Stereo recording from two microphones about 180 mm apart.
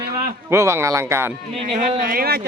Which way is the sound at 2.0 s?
55° right (ahead or behind).